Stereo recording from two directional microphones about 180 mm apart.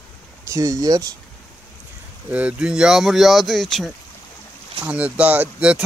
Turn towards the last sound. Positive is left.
turn(degrees=-5)  # may be behind; listen again after turning